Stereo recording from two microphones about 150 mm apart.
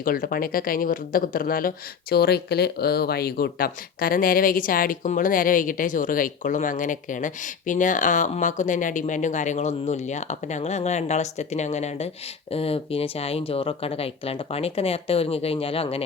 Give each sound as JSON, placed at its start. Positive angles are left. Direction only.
{"t": 0.0, "sound": "speech", "side_deg": 75}